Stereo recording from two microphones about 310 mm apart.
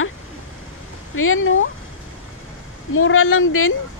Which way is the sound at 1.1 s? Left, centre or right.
Left.